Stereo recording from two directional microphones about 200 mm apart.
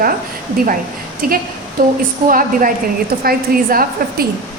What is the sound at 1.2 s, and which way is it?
A woman's voice, 45° right (ahead or behind).